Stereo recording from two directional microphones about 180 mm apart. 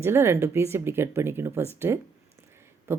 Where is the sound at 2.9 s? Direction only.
15° right (ahead or behind).